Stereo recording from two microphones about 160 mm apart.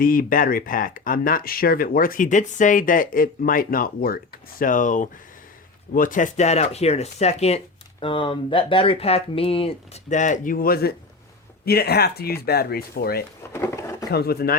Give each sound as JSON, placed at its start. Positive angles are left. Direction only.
{"t": 0.0, "sound": "speech", "side_deg": 60}
{"t": 13.5, "sound": "a sound", "side_deg": 15}
{"t": 14.1, "sound": "speech", "side_deg": 80}